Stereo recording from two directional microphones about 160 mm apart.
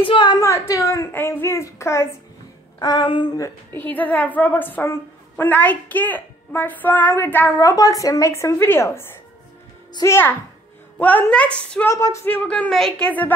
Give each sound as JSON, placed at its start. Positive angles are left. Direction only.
{"t": 0.0, "sound": "a woman's voice", "side_deg": 30}
{"t": 2.8, "sound": "a child's voice", "side_deg": 30}
{"t": 11.9, "sound": "a child's voice", "side_deg": 20}